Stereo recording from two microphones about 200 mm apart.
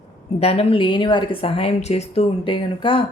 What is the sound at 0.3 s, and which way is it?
Speech, 30° left (ahead or behind).